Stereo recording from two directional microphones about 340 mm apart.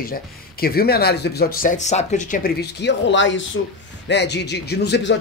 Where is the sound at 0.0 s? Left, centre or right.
Left.